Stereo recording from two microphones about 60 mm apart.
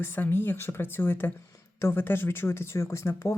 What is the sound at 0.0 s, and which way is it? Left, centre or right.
Speech, left.